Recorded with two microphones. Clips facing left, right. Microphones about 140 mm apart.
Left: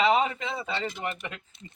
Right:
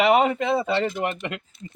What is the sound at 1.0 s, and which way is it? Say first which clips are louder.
Speech: right 7 dB; 85° right.